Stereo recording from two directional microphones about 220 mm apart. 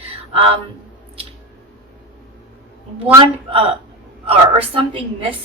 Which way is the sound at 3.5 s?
25° right (ahead or behind).